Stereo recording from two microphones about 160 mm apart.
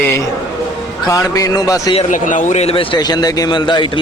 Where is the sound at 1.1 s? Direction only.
20° left (ahead or behind).